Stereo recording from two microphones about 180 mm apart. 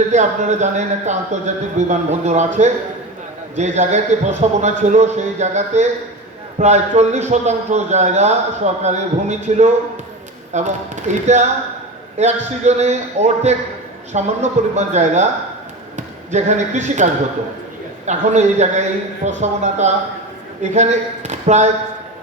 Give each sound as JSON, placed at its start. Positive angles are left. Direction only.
{"t": 0.1, "sound": "a man's voice", "side_deg": -40}